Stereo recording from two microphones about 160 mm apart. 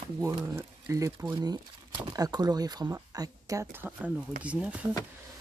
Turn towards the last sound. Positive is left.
turn(degrees=-10)  # may be behind; listen again after turning